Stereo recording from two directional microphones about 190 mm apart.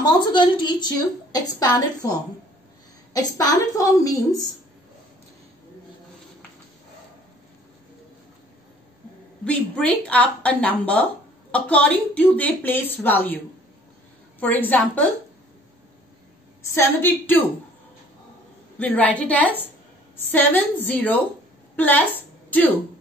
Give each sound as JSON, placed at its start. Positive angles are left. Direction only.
{"t": 0.0, "sound": "a woman's voice", "side_deg": 20}
{"t": 9.4, "sound": "speech", "side_deg": 5}
{"t": 14.4, "sound": "speech", "side_deg": 10}
{"t": 16.6, "sound": "speech", "side_deg": 15}
{"t": 18.8, "sound": "a woman's voice", "side_deg": 10}